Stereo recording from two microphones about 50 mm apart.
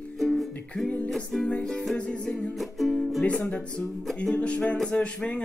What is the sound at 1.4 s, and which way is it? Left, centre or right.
Music, left.